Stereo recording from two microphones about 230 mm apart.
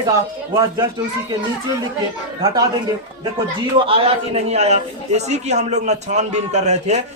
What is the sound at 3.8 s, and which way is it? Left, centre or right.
A man's voice, right.